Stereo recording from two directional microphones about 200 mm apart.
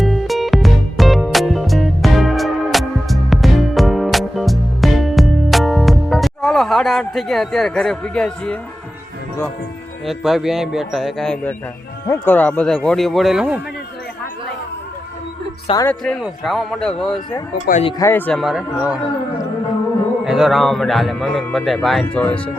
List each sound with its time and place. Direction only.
0.0 s music: centre (ahead or behind)
10.1 s a man's voice: centre (ahead or behind)
15.6 s speech: 20° left (ahead or behind)
15.9 s a man's voice: 5° left (ahead or behind)
17.7 s speech: 35° left (ahead or behind)
18.0 s a man's voice: 10° left (ahead or behind)
20.2 s a man's voice: centre (ahead or behind)